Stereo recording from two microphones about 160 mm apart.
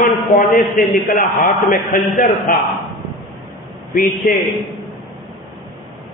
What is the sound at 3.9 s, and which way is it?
Speech, 55° left (ahead or behind).